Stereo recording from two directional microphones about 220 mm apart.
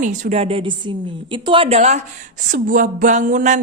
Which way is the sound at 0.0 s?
35° right (ahead or behind).